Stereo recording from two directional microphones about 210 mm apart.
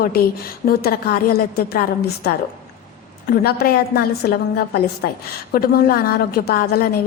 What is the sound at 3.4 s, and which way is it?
Speech, 45° left (ahead or behind).